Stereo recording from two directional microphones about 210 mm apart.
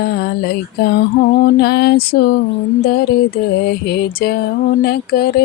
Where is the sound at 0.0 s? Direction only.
50° left (ahead or behind).